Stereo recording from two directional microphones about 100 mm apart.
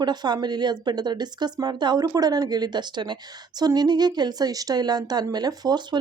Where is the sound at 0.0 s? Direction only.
45° right (ahead or behind).